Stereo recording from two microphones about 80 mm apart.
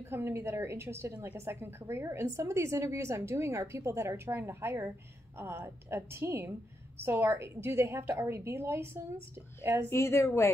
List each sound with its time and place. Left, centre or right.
0.1 s a woman's voice: right
9.8 s speech: left